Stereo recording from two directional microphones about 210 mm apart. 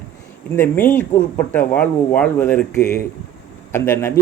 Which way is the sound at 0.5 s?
10° left (ahead or behind).